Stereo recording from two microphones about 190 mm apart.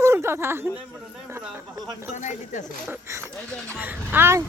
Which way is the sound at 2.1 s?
40° left (ahead or behind).